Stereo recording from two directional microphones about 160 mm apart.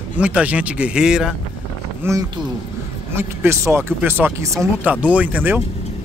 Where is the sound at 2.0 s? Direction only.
15° right (ahead or behind).